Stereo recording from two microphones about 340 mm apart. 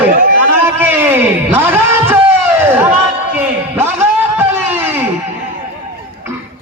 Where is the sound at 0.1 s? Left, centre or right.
Right.